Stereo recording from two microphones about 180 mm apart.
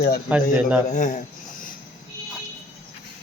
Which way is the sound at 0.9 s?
45° left (ahead or behind).